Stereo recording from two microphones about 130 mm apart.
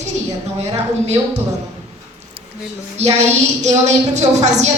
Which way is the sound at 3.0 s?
55° right (ahead or behind).